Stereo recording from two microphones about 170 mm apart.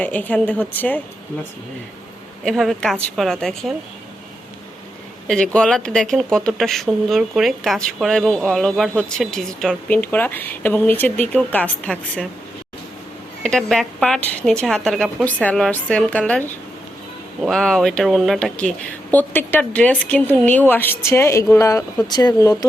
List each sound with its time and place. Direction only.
0.0 s a woman's voice: 10° left (ahead or behind)
2.4 s speech: centre (ahead or behind)
5.5 s speech: 5° left (ahead or behind)
13.4 s a woman's voice: 5° left (ahead or behind); by 22.5 s 20° left (ahead or behind)